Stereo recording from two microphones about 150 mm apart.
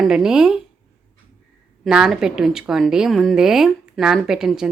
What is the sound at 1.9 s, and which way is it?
A woman's voice, 5° right (ahead or behind).